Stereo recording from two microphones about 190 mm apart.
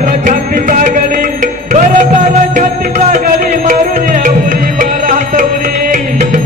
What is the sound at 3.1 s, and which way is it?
Music, 45° right (ahead or behind).